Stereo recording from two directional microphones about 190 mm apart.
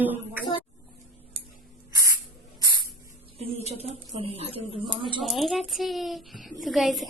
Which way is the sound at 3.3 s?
30° right (ahead or behind).